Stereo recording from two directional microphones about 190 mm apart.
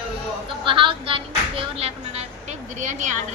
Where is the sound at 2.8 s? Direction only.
40° right (ahead or behind).